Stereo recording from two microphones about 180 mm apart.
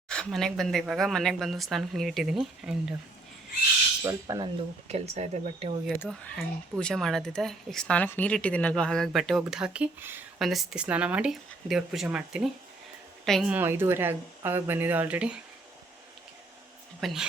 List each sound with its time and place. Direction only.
0.1 s speech: 5° left (ahead or behind)
4.0 s speech: 20° right (ahead or behind)
4.9 s speech: 35° right (ahead or behind)
6.0 s a woman's voice: 5° left (ahead or behind)
13.5 s speech: 10° right (ahead or behind)
17.0 s a woman's voice: centre (ahead or behind)